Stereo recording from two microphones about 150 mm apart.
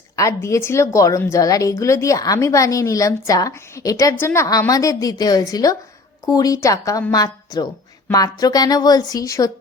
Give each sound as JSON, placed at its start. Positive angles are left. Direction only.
{"t": 0.2, "sound": "a woman's voice", "side_deg": 20}